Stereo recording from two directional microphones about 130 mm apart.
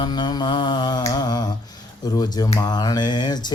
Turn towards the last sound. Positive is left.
turn(degrees=35)  # may be behind; listen again after turning